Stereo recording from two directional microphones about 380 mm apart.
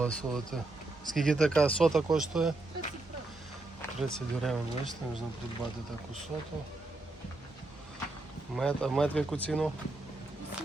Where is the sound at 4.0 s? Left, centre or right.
Centre.